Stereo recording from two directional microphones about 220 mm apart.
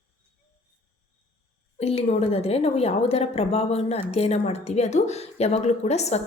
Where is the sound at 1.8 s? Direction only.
30° left (ahead or behind).